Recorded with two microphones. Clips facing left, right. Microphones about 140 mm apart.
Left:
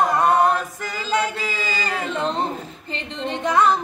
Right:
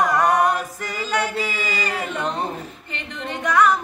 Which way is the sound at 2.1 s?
30° left (ahead or behind).